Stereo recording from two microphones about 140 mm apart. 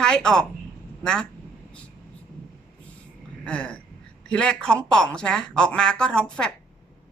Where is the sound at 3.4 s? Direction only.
10° left (ahead or behind).